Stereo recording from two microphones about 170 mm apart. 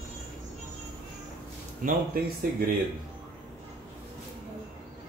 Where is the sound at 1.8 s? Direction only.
55° right (ahead or behind).